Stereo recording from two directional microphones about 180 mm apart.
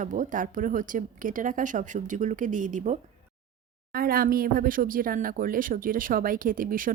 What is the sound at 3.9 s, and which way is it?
Speech, 55° right (ahead or behind).